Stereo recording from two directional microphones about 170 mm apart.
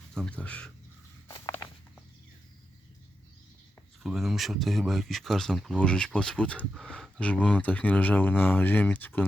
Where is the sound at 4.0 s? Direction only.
Centre (ahead or behind).